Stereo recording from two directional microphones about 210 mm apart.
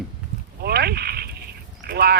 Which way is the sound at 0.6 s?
50° right (ahead or behind).